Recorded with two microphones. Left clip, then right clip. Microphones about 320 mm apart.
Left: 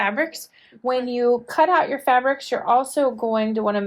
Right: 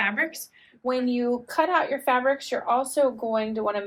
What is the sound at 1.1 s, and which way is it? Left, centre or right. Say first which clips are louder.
Speech: left 7 dB; left.